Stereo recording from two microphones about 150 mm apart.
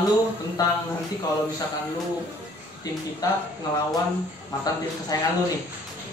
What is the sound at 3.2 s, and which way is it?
Speech, 25° left (ahead or behind).